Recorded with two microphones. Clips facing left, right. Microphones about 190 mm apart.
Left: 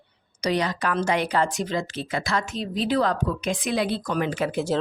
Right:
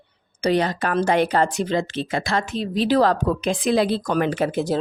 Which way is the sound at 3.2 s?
35° right (ahead or behind).